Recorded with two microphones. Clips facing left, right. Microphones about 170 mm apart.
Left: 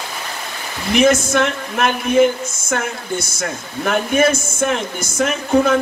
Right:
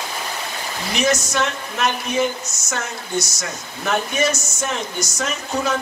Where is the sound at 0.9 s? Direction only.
55° left (ahead or behind).